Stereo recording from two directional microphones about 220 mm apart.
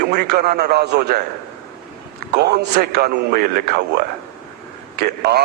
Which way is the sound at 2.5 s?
45° right (ahead or behind).